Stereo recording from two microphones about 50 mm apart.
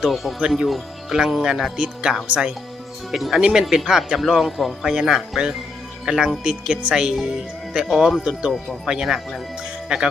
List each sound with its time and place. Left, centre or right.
0.0 s speech: centre; by 2.5 s right
3.1 s speech: centre
8.2 s speech: centre
9.9 s speech: centre